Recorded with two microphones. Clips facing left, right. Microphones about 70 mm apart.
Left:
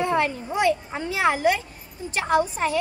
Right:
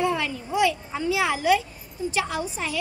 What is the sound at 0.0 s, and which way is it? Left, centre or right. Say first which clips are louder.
A child's voice: left 2 dB; left.